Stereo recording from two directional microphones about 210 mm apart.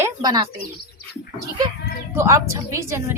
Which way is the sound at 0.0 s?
20° right (ahead or behind).